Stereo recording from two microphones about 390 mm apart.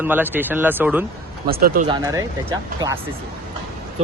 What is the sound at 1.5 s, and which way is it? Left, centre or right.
Speech, right.